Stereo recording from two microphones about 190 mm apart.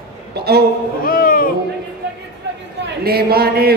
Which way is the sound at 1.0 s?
50° left (ahead or behind).